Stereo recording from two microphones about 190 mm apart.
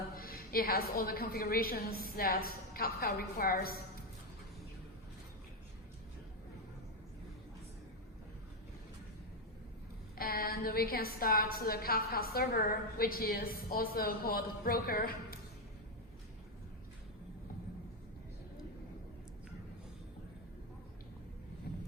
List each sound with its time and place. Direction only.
0.2 s a woman's voice: 50° left (ahead or behind)
10.2 s a woman's voice: 50° left (ahead or behind)